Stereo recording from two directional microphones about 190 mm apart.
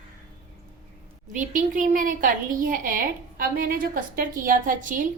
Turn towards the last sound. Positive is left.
turn(degrees=-45)  # may be behind; listen again after turning